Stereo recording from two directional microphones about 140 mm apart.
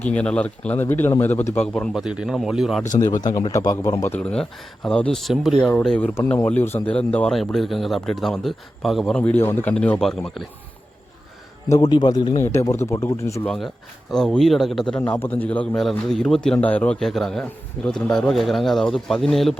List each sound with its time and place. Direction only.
0.0 s a man's voice: 10° left (ahead or behind)
3.2 s speech: 25° left (ahead or behind)
4.0 s a man's voice: 10° left (ahead or behind)
11.7 s a man's voice: 30° left (ahead or behind)
12.4 s speech: 20° left (ahead or behind)
14.1 s a man's voice: 5° left (ahead or behind)